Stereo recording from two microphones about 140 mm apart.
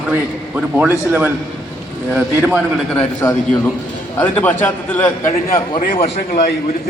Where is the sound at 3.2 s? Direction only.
20° left (ahead or behind).